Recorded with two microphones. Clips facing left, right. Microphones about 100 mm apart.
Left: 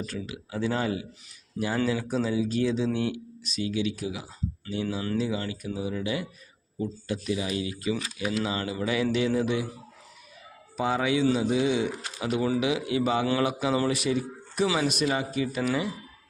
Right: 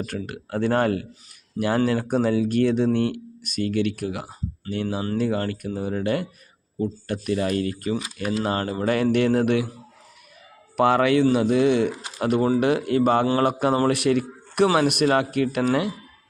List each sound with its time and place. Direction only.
0.0 s speech: 55° right (ahead or behind)
6.7 s speech: 40° right (ahead or behind)
7.1 s speech: 55° right (ahead or behind)
8.1 s speech: 40° right (ahead or behind); by 9.6 s 65° right (ahead or behind)
10.8 s speech: 65° right (ahead or behind)